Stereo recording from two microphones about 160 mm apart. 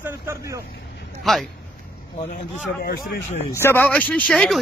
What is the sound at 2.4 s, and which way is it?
Speech, 65° left (ahead or behind).